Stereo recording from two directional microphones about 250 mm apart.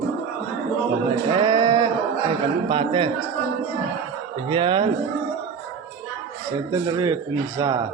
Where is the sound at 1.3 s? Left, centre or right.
Centre.